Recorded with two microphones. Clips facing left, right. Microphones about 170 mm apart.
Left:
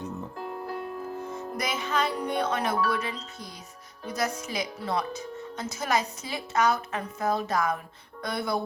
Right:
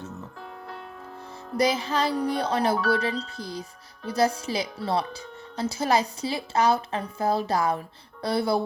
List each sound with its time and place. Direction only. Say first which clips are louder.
1.2 s speech: right 12 dB; 30° right (ahead or behind)